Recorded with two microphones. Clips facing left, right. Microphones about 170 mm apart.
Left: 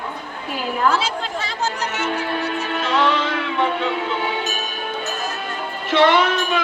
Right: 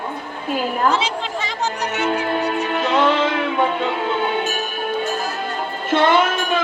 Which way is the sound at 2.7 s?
45° right (ahead or behind).